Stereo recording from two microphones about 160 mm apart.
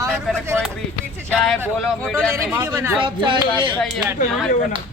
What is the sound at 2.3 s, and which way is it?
Speech, 15° right (ahead or behind).